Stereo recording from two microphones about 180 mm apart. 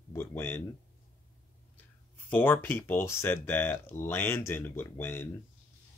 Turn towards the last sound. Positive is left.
turn(degrees=10)  # may be behind; listen again after turning